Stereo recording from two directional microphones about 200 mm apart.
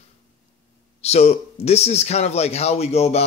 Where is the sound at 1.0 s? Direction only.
30° left (ahead or behind).